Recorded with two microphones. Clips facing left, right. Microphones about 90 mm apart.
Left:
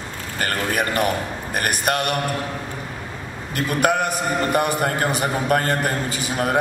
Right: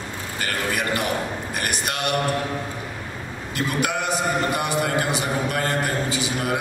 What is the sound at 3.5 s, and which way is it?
A man's voice, 50° left (ahead or behind).